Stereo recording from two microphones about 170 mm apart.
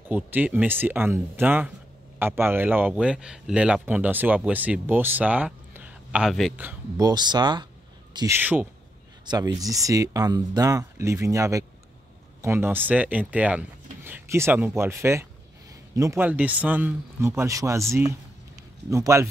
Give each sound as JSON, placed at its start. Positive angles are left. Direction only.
{"t": 0.1, "sound": "speech", "side_deg": -10}
{"t": 7.0, "sound": "speech", "side_deg": -25}
{"t": 8.4, "sound": "speech", "side_deg": -10}
{"t": 9.2, "sound": "speech", "side_deg": -25}